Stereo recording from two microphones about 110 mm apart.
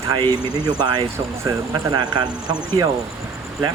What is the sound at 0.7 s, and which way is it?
Speech, 40° right (ahead or behind).